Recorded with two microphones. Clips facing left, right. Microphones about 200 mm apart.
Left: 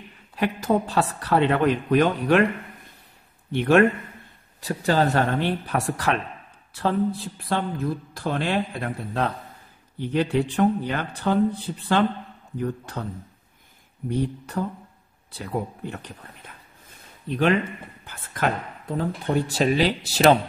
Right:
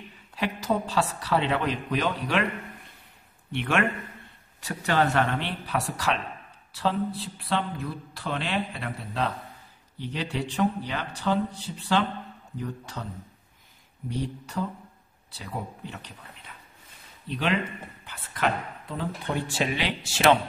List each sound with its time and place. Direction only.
0.4 s a woman's voice: 50° left (ahead or behind)
3.5 s a woman's voice: 40° left (ahead or behind)
14.0 s a woman's voice: 55° left (ahead or behind)
18.0 s speech: 45° left (ahead or behind)